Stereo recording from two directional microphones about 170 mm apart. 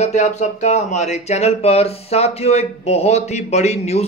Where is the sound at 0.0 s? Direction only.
45° left (ahead or behind).